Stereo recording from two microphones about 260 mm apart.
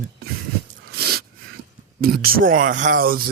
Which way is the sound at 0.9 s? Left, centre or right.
Right.